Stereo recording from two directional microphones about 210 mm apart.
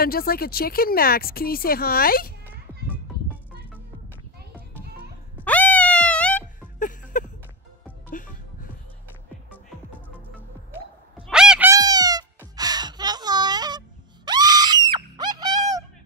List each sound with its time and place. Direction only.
0.0 s a woman's voice: 45° left (ahead or behind)
5.4 s cat: 5° left (ahead or behind)
6.8 s a sound: 40° left (ahead or behind)
8.1 s music: 40° left (ahead or behind)
11.1 s fowl: 5° right (ahead or behind)
11.7 s cat: 20° right (ahead or behind)